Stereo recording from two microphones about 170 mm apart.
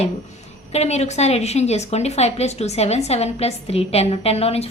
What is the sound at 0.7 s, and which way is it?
A woman's voice, 40° left (ahead or behind).